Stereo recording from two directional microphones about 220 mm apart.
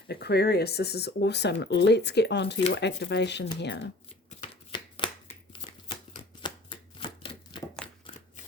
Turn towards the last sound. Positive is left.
turn(degrees=20)  # may be behind; listen again after turning